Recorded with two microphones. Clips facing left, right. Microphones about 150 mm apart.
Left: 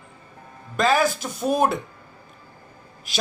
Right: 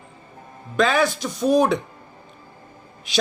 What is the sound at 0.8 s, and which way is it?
Speech, 5° left (ahead or behind).